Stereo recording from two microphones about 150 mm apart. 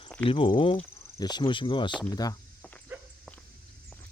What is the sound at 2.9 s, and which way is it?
Walk, 10° right (ahead or behind).